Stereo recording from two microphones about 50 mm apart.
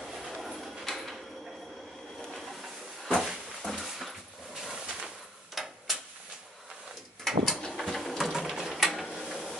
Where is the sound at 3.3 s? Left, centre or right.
Centre.